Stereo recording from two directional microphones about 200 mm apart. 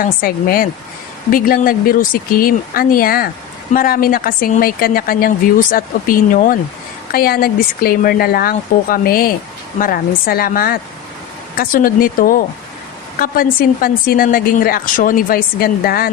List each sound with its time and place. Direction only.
0.0 s speech: 45° left (ahead or behind)